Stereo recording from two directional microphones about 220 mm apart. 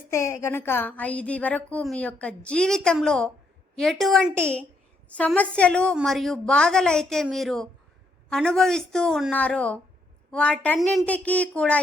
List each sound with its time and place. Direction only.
0.1 s a woman's voice: 10° left (ahead or behind)